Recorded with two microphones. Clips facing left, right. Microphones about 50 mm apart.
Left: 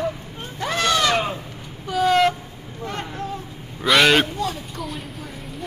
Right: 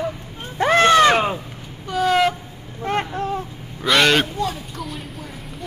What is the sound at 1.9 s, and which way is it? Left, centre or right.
Vehicle, centre.